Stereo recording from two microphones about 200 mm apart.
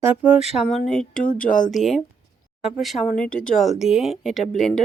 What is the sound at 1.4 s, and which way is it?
Speech, 40° left (ahead or behind).